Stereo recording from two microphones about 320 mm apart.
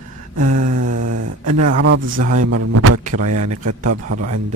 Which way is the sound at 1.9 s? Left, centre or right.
Right.